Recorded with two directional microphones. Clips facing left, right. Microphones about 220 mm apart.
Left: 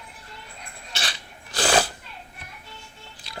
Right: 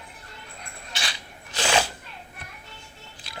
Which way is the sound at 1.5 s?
35° left (ahead or behind).